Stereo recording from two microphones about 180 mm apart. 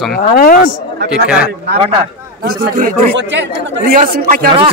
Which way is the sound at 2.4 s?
50° right (ahead or behind).